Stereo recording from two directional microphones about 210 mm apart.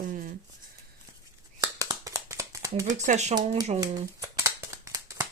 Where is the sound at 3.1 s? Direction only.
35° right (ahead or behind).